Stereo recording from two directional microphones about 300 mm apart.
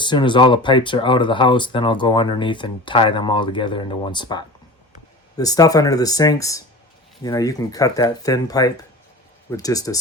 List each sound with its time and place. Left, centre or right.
0.0 s speech: centre